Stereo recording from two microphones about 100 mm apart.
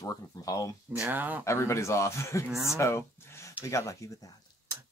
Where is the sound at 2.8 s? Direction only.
30° left (ahead or behind).